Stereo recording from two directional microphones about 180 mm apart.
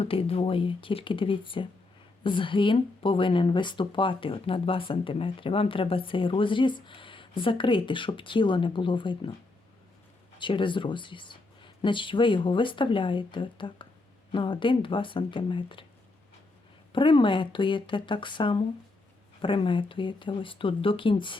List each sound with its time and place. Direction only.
0.0 s speech: 30° left (ahead or behind)
10.3 s speech: 25° left (ahead or behind)
16.9 s speech: 25° left (ahead or behind)